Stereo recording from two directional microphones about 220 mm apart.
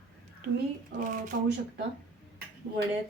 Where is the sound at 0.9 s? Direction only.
35° right (ahead or behind).